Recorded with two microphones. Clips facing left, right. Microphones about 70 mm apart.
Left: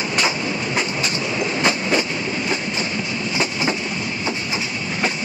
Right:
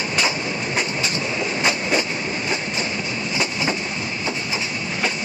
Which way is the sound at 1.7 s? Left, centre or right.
Left.